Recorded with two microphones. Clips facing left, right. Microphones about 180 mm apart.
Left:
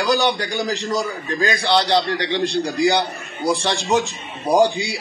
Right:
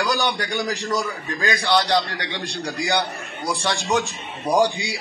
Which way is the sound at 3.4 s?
35° left (ahead or behind).